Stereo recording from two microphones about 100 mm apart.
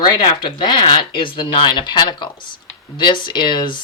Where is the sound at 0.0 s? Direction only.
50° left (ahead or behind).